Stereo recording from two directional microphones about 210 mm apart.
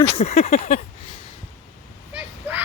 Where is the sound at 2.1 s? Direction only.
10° right (ahead or behind).